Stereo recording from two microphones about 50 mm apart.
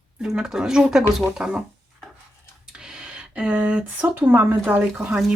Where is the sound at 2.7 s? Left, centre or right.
Centre.